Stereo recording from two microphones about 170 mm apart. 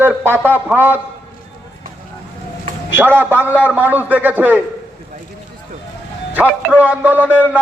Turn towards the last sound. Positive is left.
turn(degrees=-10)  # may be behind; listen again after turning